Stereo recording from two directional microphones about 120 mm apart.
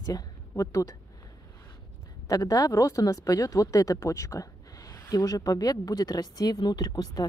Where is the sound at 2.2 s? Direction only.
30° left (ahead or behind).